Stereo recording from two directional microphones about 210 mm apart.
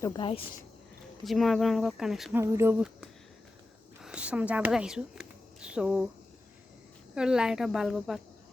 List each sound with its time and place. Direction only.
0.0 s speech: 20° left (ahead or behind)
1.2 s speech: centre (ahead or behind)
2.4 s speech: 15° right (ahead or behind)
7.2 s speech: 5° right (ahead or behind)